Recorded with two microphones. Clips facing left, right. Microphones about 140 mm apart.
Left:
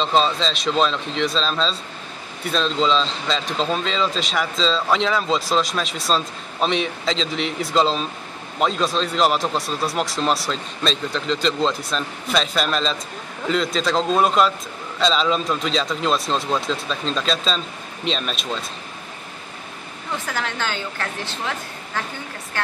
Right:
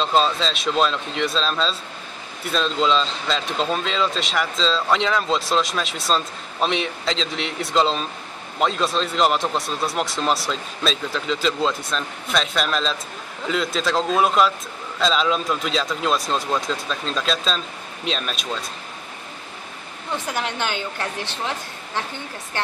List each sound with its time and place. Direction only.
0.0 s speech: centre (ahead or behind)
20.2 s a woman's voice: 20° right (ahead or behind)